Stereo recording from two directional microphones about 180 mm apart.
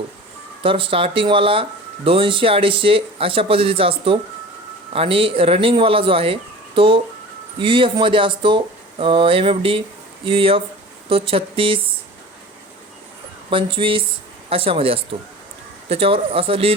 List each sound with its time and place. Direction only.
0.6 s speech: 30° right (ahead or behind)
13.5 s speech: 30° right (ahead or behind)